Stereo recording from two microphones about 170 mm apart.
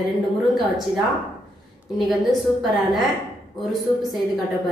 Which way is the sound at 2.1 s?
Centre (ahead or behind).